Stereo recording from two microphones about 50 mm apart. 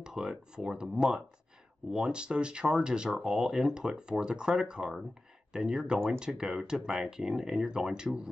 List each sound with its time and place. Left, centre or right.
0.0 s speech: centre